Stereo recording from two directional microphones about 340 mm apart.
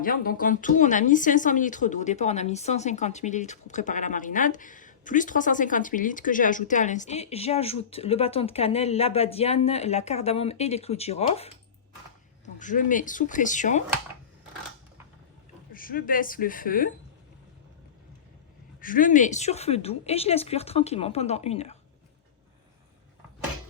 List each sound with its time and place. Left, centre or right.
0.0 s a woman's voice: left
12.5 s a woman's voice: left
15.7 s a woman's voice: left
18.8 s a woman's voice: left